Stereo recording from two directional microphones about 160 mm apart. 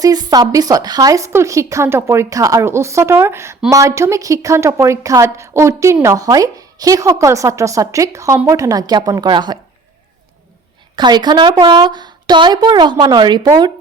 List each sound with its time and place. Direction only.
0.0 s a woman's voice: 25° right (ahead or behind)
10.9 s a woman's voice: 25° right (ahead or behind)